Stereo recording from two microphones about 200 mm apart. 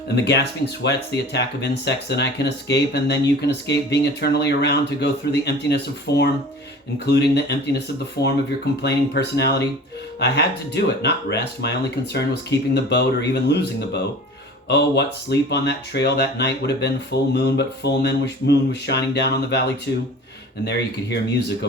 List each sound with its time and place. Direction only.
0.3 s speech: 55° left (ahead or behind)